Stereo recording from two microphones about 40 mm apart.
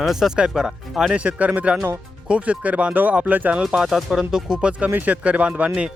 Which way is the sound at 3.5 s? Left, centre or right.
Right.